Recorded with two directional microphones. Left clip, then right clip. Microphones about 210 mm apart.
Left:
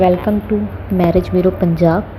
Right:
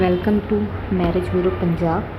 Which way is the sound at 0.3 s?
5° left (ahead or behind).